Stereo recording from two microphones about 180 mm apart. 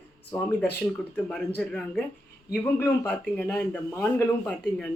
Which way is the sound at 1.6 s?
5° left (ahead or behind).